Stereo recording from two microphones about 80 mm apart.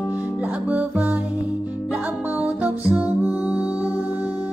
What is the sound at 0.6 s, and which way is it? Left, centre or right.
Music, right.